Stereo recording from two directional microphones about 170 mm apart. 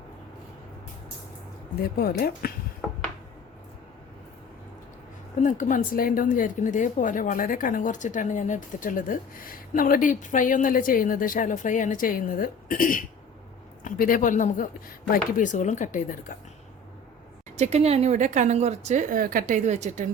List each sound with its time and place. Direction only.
1.8 s speech: 65° left (ahead or behind)
5.4 s a woman's voice: 45° left (ahead or behind)
17.6 s speech: 40° right (ahead or behind)